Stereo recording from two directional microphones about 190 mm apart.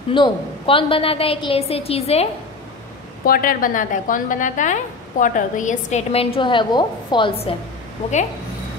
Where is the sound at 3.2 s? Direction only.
50° left (ahead or behind); by 7.6 s 25° left (ahead or behind).